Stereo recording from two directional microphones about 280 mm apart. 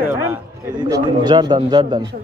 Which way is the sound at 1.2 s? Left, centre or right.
Centre.